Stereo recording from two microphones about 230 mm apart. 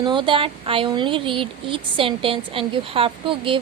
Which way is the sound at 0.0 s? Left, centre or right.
Right.